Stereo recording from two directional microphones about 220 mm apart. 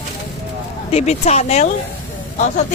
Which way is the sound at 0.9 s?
30° left (ahead or behind).